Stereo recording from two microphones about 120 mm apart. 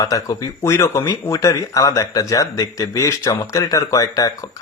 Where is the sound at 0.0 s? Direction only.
30° left (ahead or behind).